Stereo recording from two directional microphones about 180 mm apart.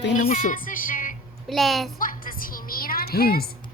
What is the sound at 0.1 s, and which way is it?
Music, 45° left (ahead or behind).